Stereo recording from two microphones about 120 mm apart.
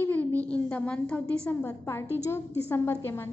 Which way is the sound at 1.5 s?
20° left (ahead or behind).